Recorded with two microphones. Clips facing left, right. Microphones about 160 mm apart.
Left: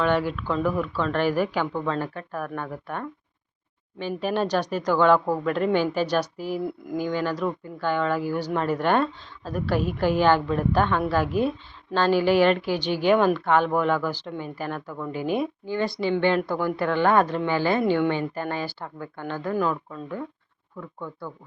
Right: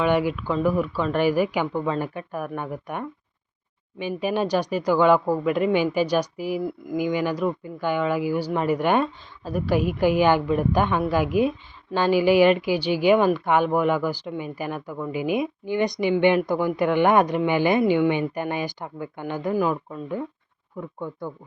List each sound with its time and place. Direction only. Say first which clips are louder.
0.0 s a woman's voice: right 2 dB; 10° right (ahead or behind)